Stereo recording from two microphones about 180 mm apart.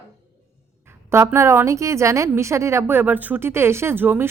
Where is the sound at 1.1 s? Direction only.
15° right (ahead or behind).